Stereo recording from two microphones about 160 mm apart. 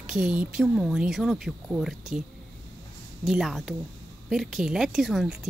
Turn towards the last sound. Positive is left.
turn(degrees=0)  # may be behind; listen again after turning